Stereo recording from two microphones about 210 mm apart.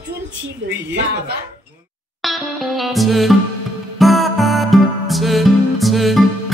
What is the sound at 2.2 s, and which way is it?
Music, centre (ahead or behind).